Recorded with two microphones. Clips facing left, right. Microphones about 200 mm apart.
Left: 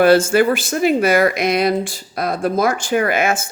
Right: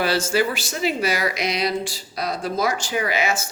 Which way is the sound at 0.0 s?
55° left (ahead or behind).